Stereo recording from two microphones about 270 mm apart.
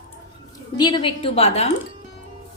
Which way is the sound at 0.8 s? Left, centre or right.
Centre.